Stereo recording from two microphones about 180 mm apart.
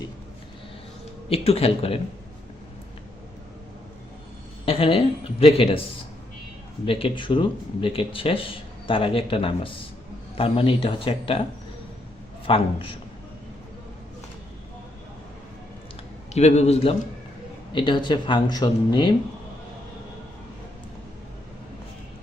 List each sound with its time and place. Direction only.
1.3 s speech: 35° left (ahead or behind)
4.6 s speech: 30° left (ahead or behind)
6.8 s speech: 30° left (ahead or behind)
12.5 s speech: 30° left (ahead or behind)
16.3 s speech: 40° left (ahead or behind)
17.7 s speech: 25° left (ahead or behind)